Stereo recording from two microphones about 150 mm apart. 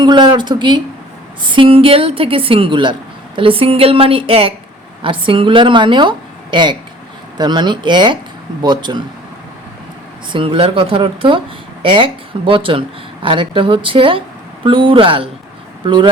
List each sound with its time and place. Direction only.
0.0 s a woman's voice: 30° right (ahead or behind)
10.3 s a woman's voice: 35° right (ahead or behind)